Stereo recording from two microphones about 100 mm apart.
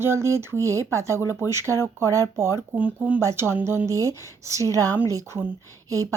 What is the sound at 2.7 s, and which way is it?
Speech, 15° right (ahead or behind).